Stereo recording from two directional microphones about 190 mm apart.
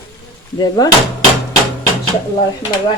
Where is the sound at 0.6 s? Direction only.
20° left (ahead or behind).